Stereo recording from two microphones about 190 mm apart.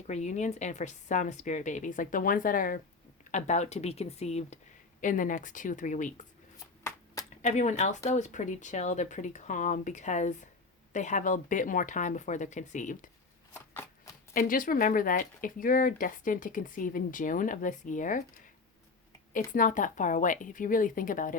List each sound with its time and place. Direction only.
0.1 s speech: 40° left (ahead or behind)
7.4 s speech: 35° left (ahead or behind)
13.5 s shuffling cards: 15° left (ahead or behind)
14.3 s speech: 45° left (ahead or behind)
19.3 s speech: 45° left (ahead or behind)